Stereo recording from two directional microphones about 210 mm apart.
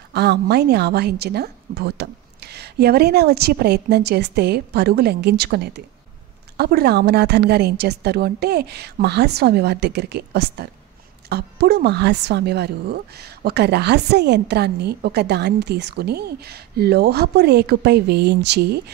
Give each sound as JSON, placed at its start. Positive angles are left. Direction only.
{"t": 0.1, "sound": "speech", "side_deg": -50}